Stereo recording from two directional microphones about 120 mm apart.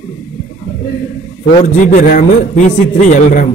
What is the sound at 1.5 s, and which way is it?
A man's voice, 90° left.